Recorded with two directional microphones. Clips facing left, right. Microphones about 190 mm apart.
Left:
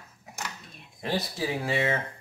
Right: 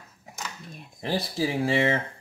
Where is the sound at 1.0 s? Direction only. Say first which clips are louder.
Right 3 dB; 30° right (ahead or behind).